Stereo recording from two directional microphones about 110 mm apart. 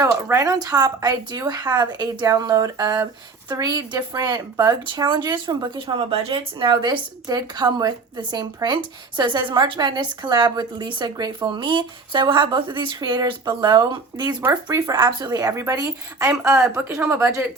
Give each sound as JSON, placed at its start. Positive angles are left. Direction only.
{"t": 0.0, "sound": "speech", "side_deg": -30}
{"t": 5.7, "sound": "speech", "side_deg": -55}
{"t": 14.4, "sound": "speech", "side_deg": -25}
{"t": 14.8, "sound": "speech", "side_deg": -40}